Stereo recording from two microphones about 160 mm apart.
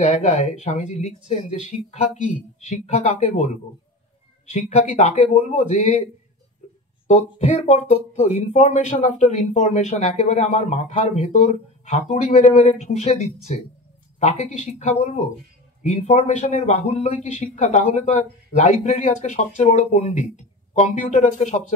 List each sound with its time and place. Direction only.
0.0 s speech: 45° left (ahead or behind)
7.1 s speech: 45° left (ahead or behind)